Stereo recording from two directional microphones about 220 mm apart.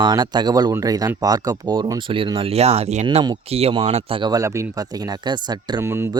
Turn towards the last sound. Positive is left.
turn(degrees=-10)  # may be behind; listen again after turning